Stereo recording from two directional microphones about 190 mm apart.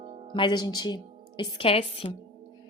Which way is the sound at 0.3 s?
25° left (ahead or behind).